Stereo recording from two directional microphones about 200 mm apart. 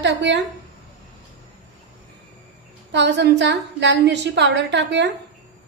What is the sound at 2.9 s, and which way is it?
A woman's voice, 60° right (ahead or behind).